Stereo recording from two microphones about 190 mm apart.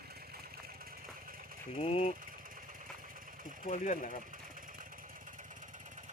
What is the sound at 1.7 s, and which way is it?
Speech, 30° left (ahead or behind).